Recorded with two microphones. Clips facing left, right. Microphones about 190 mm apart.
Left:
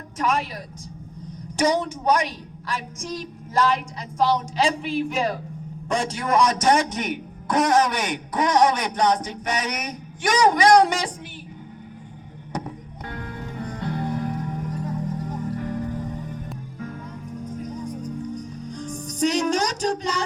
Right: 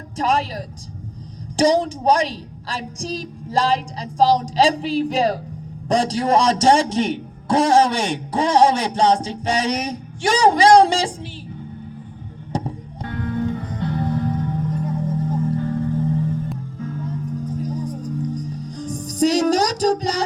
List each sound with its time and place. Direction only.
0.2 s a woman's voice: 35° right (ahead or behind)
12.5 s music: 30° right (ahead or behind)
17.1 s music: 35° right (ahead or behind)